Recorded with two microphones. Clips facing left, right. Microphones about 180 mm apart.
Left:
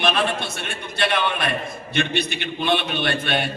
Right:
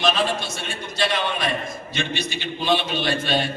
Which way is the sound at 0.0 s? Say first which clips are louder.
Even; 60° left (ahead or behind).